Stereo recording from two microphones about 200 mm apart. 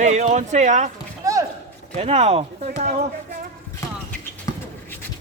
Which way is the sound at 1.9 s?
35° right (ahead or behind).